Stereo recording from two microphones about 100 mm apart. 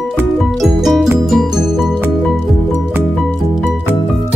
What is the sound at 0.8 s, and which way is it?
Music, 5° right (ahead or behind).